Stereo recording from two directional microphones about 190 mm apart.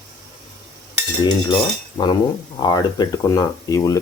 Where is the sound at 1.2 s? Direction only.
25° left (ahead or behind).